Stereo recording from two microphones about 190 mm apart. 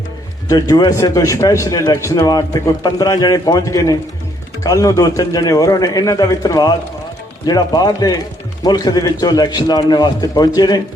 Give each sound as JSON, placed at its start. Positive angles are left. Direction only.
{"t": 0.4, "sound": "a man's voice", "side_deg": 20}